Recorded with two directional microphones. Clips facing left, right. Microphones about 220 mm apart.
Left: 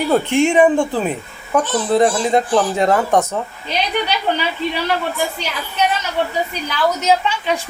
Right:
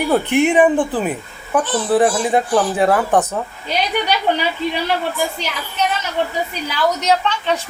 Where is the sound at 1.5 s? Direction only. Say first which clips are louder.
Even; 5° right (ahead or behind).